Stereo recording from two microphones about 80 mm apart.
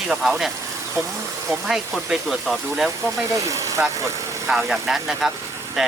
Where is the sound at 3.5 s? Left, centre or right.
Right.